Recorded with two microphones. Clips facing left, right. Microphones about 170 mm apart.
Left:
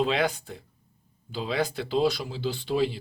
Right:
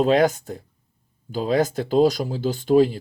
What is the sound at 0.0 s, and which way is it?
Speech, 45° right (ahead or behind).